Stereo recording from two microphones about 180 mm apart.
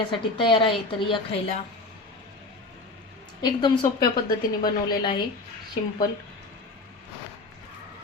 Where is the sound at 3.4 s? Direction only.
25° left (ahead or behind).